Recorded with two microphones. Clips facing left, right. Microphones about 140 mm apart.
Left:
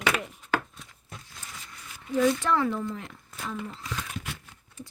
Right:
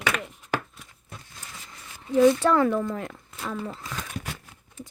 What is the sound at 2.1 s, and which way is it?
Speech, 30° right (ahead or behind).